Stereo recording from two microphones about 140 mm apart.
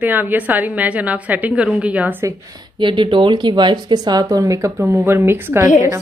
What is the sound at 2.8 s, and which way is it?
Speech, 35° right (ahead or behind).